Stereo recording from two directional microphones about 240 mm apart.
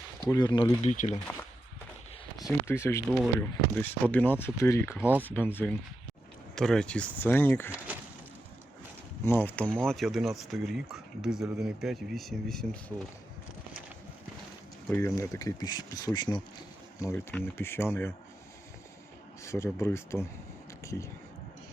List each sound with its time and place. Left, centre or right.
0.3 s speech: centre
1.1 s speech: centre
9.2 s speech: centre
14.8 s speech: centre
19.4 s speech: centre